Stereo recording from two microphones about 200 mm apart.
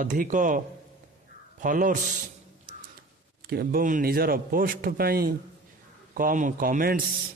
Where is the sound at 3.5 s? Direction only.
50° right (ahead or behind).